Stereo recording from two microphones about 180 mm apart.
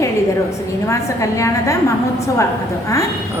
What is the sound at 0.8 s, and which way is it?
Speech, 15° left (ahead or behind).